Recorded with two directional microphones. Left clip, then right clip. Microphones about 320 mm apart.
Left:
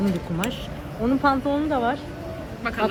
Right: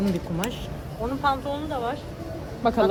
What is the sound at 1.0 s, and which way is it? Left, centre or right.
Speech, left.